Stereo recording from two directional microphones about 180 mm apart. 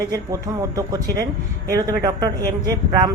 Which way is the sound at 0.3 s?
20° right (ahead or behind).